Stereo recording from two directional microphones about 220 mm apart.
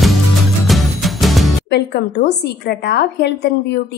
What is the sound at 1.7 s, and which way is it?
A woman's voice, 50° left (ahead or behind).